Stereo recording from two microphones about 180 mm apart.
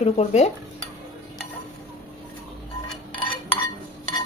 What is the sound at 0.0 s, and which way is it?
Speech, 35° left (ahead or behind).